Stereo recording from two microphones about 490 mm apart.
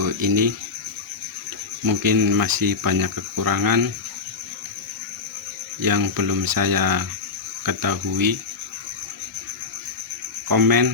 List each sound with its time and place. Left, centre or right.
0.0 s speech: right
1.8 s speech: right
5.8 s speech: right
10.5 s speech: right